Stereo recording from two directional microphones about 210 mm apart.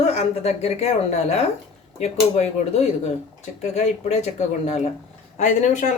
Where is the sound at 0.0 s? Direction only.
30° left (ahead or behind).